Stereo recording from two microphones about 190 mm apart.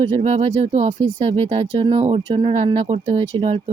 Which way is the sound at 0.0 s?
35° right (ahead or behind).